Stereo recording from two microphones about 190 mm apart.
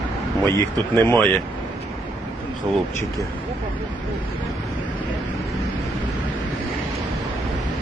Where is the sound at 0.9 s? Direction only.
10° left (ahead or behind).